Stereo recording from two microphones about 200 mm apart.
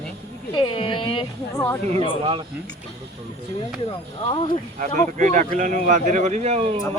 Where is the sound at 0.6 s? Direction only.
25° left (ahead or behind).